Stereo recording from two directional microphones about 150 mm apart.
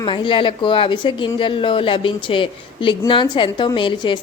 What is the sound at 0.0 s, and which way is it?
A woman's voice, 35° left (ahead or behind).